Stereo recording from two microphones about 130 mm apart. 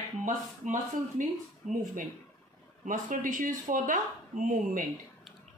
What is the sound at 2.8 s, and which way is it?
Speech, 90° right.